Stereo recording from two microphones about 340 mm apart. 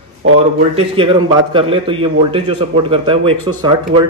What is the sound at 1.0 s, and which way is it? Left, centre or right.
A man's voice, centre.